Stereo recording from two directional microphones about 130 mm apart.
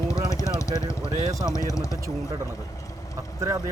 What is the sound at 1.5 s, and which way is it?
Speech, 25° left (ahead or behind).